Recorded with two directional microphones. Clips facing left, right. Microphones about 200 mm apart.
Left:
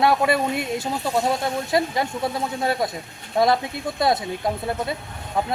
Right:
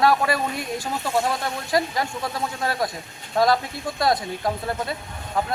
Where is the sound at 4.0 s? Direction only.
25° left (ahead or behind).